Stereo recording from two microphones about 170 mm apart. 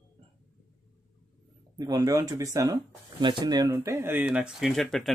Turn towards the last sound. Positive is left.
turn(degrees=0)  # may be behind; listen again after turning